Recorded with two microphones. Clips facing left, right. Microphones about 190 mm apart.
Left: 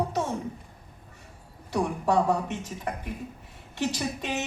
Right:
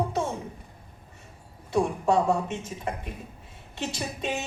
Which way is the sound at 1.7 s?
25° right (ahead or behind).